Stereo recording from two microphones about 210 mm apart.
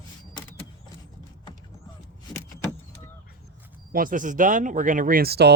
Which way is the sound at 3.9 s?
40° right (ahead or behind).